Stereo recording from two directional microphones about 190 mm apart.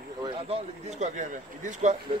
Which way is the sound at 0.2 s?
30° right (ahead or behind).